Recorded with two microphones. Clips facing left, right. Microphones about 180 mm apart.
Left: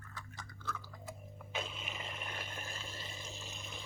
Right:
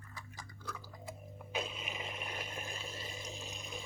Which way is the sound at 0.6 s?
10° right (ahead or behind).